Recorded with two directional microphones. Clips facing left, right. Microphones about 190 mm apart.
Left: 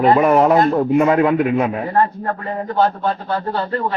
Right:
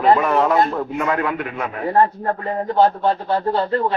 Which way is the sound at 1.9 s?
25° right (ahead or behind).